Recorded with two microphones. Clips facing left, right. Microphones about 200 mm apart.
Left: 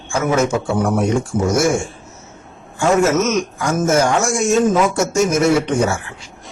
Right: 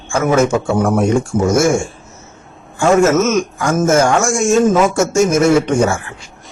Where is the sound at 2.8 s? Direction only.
50° right (ahead or behind).